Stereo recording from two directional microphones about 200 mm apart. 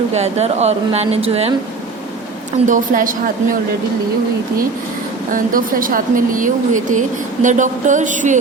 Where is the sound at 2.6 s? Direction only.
40° right (ahead or behind).